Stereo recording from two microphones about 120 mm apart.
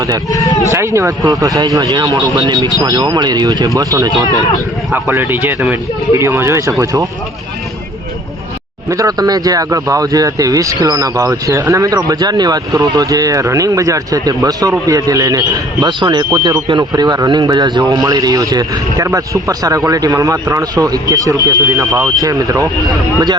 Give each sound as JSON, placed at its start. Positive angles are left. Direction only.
{"t": 0.3, "sound": "speech", "side_deg": 30}
{"t": 0.7, "sound": "speech", "side_deg": -25}
{"t": 4.9, "sound": "speech", "side_deg": -20}
{"t": 6.1, "sound": "speech", "side_deg": -20}
{"t": 8.9, "sound": "speech", "side_deg": -30}